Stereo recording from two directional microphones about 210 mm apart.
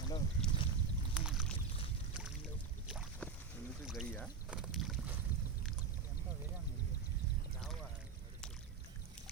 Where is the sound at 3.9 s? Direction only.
Centre (ahead or behind).